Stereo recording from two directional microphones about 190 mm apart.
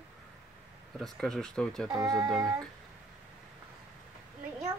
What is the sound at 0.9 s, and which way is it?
Speech, centre (ahead or behind).